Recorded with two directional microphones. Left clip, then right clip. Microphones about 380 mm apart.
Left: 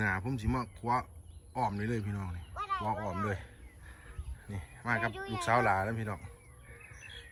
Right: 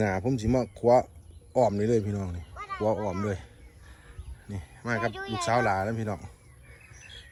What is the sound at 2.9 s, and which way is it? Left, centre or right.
Speech, centre.